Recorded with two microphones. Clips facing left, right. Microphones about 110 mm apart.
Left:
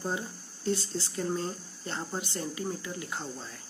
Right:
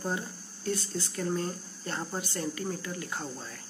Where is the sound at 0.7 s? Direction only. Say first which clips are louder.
Left 2 dB; 25° left (ahead or behind).